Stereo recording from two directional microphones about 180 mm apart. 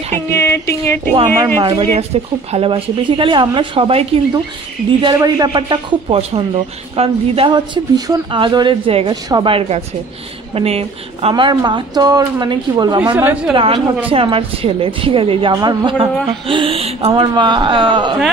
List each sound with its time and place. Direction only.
0.3 s a sound: 15° left (ahead or behind)
1.6 s a man's voice: 25° right (ahead or behind)
13.1 s speech: 10° right (ahead or behind)
13.5 s a man's voice: 25° right (ahead or behind)